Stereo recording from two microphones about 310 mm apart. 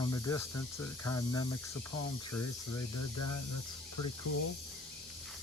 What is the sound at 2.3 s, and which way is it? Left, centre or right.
Speech, left.